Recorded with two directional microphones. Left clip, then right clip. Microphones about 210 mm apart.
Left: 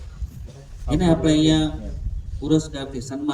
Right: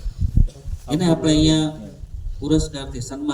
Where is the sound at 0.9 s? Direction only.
20° right (ahead or behind).